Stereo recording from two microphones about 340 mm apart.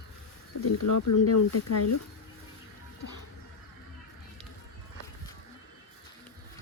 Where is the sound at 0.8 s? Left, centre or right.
Left.